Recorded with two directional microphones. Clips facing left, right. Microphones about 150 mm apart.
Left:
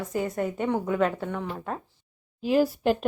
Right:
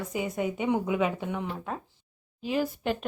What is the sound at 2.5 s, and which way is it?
Speech, 40° left (ahead or behind).